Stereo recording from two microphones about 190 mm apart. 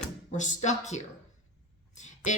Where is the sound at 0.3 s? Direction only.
40° left (ahead or behind).